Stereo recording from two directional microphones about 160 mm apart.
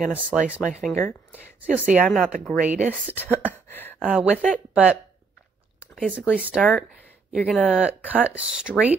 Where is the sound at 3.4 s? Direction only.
10° left (ahead or behind).